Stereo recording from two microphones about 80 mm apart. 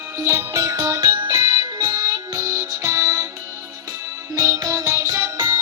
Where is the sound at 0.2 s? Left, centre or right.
Right.